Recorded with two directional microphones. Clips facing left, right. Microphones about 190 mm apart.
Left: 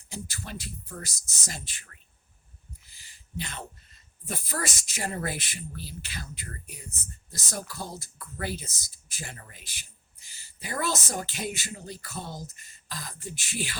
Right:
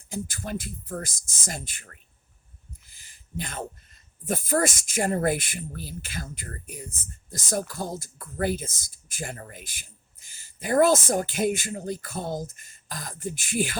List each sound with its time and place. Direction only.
0.1 s speech: 50° right (ahead or behind)
2.9 s a sound: 45° right (ahead or behind)
4.3 s speech: 50° right (ahead or behind)